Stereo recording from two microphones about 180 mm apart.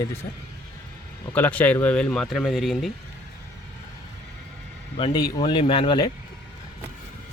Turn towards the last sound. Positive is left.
turn(degrees=25)  # may be behind; listen again after turning